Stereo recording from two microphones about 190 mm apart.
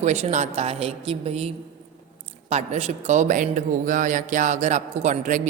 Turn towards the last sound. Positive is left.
turn(degrees=-40)  # may be behind; listen again after turning